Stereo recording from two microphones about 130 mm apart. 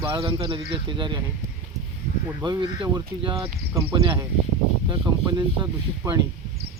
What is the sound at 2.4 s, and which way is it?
Speech, 35° right (ahead or behind).